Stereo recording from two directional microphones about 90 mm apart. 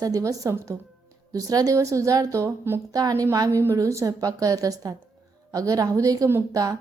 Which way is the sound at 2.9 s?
45° right (ahead or behind).